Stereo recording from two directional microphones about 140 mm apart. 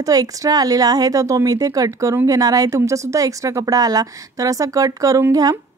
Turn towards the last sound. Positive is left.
turn(degrees=-25)  # may be behind; listen again after turning